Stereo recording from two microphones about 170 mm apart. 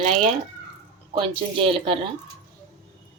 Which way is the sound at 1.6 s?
30° right (ahead or behind).